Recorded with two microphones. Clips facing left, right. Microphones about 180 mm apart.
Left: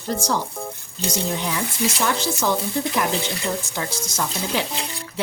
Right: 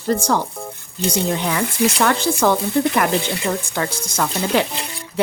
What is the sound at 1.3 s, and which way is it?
Speech, 65° right (ahead or behind).